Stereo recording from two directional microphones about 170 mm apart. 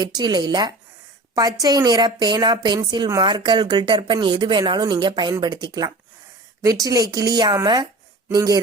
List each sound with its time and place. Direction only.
0.0 s speech: 25° right (ahead or behind)